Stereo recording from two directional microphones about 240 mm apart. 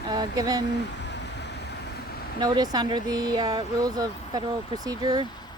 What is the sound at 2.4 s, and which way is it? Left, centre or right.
Speech, centre.